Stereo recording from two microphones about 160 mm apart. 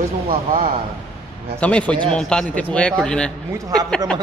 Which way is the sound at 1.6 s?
10° left (ahead or behind).